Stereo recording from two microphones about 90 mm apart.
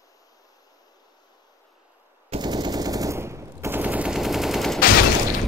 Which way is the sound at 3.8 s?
15° right (ahead or behind).